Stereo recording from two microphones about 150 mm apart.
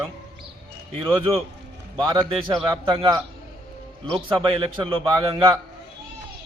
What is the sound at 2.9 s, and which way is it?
A man's voice, 35° right (ahead or behind).